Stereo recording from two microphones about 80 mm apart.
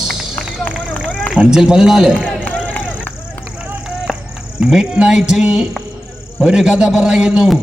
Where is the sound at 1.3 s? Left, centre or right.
Centre.